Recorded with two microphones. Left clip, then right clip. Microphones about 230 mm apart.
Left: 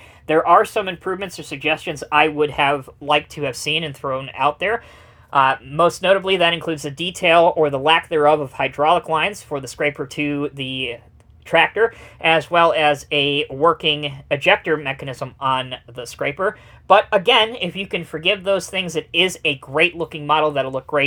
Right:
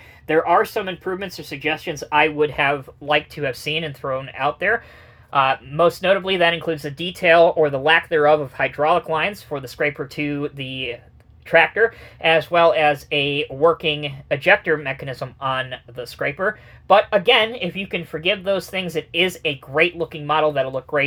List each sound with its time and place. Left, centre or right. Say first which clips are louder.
0.3 s speech: left 3 dB; left